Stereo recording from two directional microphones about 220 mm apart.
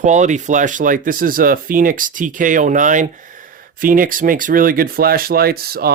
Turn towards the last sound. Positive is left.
turn(degrees=-45)  # may be behind; listen again after turning